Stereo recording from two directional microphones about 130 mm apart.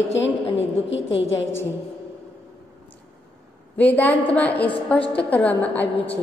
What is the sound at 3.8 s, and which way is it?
A woman's voice, 10° left (ahead or behind).